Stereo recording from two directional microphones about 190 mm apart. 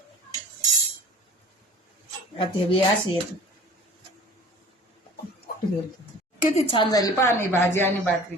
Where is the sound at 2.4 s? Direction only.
25° left (ahead or behind).